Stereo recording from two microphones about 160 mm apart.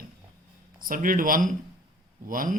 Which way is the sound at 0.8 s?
60° right (ahead or behind).